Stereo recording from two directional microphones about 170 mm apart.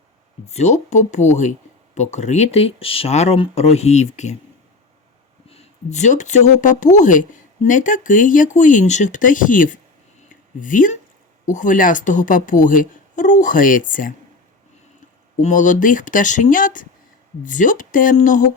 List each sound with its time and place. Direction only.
0.4 s speech: 40° left (ahead or behind)
5.5 s speech: 40° left (ahead or behind)
15.4 s speech: 45° left (ahead or behind)